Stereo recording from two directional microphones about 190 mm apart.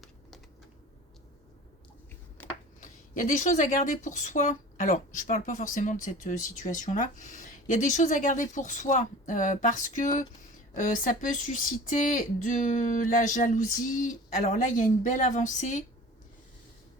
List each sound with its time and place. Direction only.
2.8 s speech: 40° left (ahead or behind)